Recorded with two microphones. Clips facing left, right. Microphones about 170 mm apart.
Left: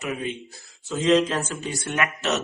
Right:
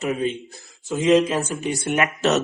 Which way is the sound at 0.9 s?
15° right (ahead or behind).